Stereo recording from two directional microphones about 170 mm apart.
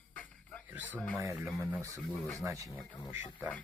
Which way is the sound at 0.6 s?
10° right (ahead or behind).